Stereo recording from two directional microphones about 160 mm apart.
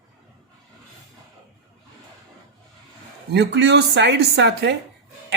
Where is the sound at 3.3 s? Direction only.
90° right.